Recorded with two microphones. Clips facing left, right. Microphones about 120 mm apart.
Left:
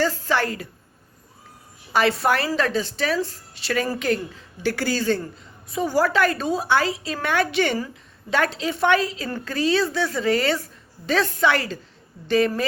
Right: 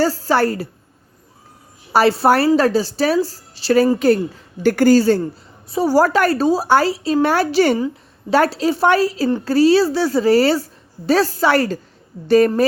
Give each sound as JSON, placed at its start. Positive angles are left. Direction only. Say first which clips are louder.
{"t": 0.0, "sound": "a woman's voice", "louder": "right 6 dB", "side_deg": -35}
{"t": 1.9, "sound": "a woman's voice", "louder": "right 6 dB", "side_deg": -35}